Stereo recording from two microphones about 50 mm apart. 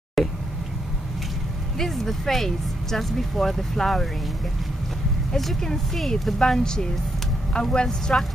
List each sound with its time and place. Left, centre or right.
0.2 s a sound: centre
1.8 s speech: centre
5.3 s speech: centre